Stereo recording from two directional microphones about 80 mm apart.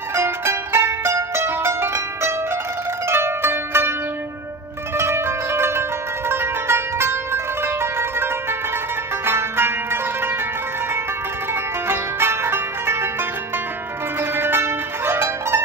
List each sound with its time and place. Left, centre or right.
0.1 s music: right
3.1 s zither: right
4.9 s zither: right
7.6 s music: right
11.9 s music: right
14.3 s music: right